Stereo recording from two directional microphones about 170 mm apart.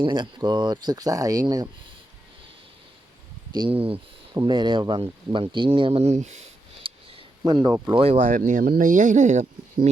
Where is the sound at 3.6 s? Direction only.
35° right (ahead or behind).